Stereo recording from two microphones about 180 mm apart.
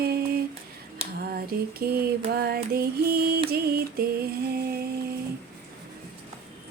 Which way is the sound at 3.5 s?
60° right (ahead or behind).